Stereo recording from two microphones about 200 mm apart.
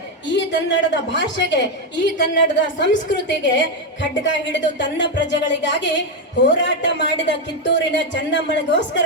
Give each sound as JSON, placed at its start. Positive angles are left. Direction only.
{"t": 0.3, "sound": "a man's voice", "side_deg": 65}